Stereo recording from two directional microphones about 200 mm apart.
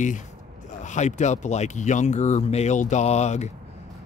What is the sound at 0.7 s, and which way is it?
Speech, 35° left (ahead or behind).